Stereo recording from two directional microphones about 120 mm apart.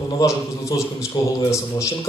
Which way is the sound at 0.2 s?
25° left (ahead or behind).